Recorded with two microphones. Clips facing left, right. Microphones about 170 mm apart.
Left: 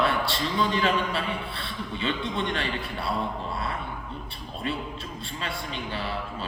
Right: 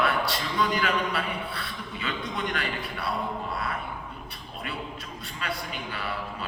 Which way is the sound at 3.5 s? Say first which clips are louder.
Even; 25° left (ahead or behind).